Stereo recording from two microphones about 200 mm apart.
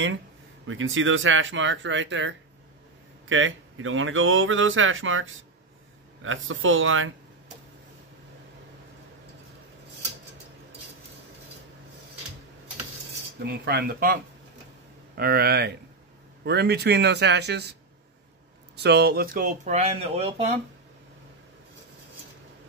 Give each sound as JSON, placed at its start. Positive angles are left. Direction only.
{"t": 0.7, "sound": "speech", "side_deg": -75}
{"t": 3.3, "sound": "speech", "side_deg": -75}
{"t": 13.4, "sound": "a man's voice", "side_deg": -50}
{"t": 18.8, "sound": "speech", "side_deg": -55}